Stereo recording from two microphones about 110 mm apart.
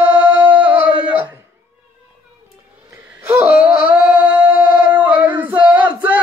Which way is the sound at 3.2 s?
20° right (ahead or behind).